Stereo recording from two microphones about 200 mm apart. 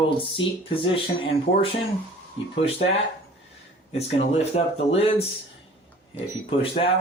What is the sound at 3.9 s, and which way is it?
Speech, 30° left (ahead or behind).